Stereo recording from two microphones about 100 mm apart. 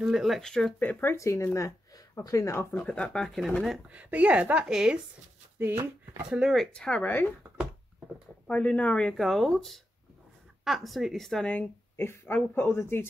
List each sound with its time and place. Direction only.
0.0 s speech: 5° right (ahead or behind)
0.7 s speech: 15° left (ahead or behind)
1.1 s speech: 30° left (ahead or behind)
2.7 s speech: 15° left (ahead or behind)
3.9 s a woman's voice: 15° right (ahead or behind)
5.6 s speech: 20° right (ahead or behind)
6.3 s speech: centre (ahead or behind)
8.5 s speech: 10° left (ahead or behind)
11.5 s speech: 20° left (ahead or behind)